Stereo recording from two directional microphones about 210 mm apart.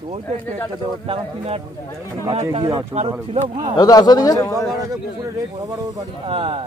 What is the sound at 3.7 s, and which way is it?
Speech, 20° left (ahead or behind).